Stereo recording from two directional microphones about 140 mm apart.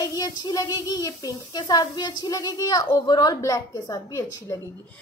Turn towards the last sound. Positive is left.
turn(degrees=20)  # may be behind; listen again after turning